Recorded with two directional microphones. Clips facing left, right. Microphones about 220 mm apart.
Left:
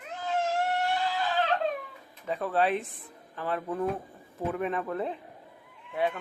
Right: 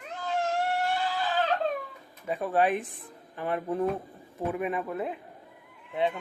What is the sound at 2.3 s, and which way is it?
A man's voice, 15° right (ahead or behind).